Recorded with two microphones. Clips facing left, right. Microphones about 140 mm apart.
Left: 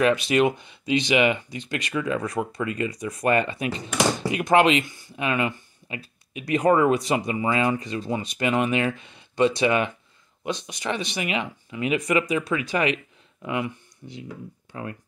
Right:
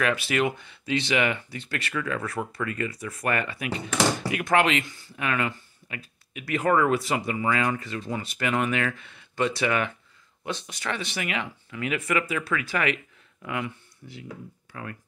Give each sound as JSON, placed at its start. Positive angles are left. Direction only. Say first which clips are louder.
{"t": 0.0, "sound": "speech", "louder": "left 5 dB", "side_deg": 20}